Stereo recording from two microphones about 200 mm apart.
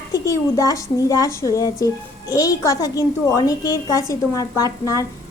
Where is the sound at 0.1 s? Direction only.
15° left (ahead or behind).